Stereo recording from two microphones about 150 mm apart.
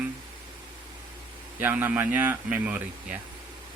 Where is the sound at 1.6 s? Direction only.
10° right (ahead or behind).